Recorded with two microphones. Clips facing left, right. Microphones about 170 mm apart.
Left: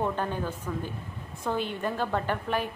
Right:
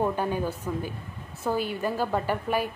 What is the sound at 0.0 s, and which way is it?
A woman's voice, 10° right (ahead or behind).